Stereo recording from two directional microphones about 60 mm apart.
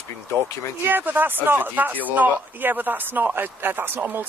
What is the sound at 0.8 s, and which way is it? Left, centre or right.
Speech, right.